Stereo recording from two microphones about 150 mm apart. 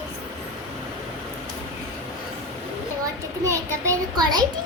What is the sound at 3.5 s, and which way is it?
Child singing, 20° right (ahead or behind).